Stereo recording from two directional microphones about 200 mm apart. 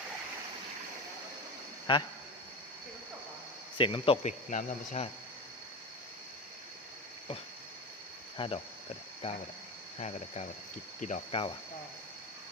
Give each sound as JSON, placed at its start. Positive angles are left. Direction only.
{"t": 1.9, "sound": "speech", "side_deg": 25}
{"t": 3.8, "sound": "speech", "side_deg": 25}
{"t": 8.4, "sound": "speech", "side_deg": 25}
{"t": 11.0, "sound": "speech", "side_deg": 35}